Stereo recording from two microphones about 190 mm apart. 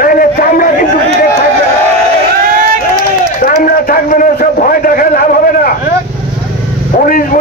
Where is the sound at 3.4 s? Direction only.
50° left (ahead or behind).